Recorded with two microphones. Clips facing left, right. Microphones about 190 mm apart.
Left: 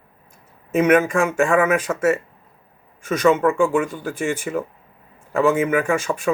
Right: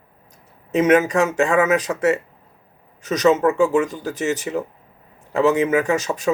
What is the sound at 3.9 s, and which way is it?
Speech, 40° right (ahead or behind).